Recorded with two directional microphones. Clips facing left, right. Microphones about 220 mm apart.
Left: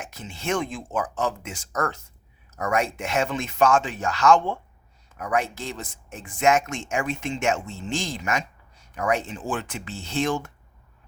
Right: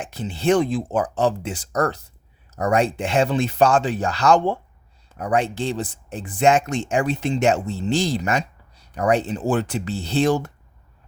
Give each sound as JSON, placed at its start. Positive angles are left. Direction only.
{"t": 0.0, "sound": "speech", "side_deg": -30}